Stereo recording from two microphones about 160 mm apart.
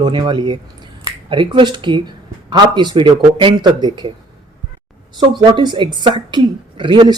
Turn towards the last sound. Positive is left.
turn(degrees=-30)  # may be behind; listen again after turning